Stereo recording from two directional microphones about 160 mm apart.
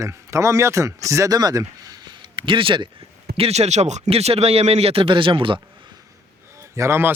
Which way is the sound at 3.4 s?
40° right (ahead or behind).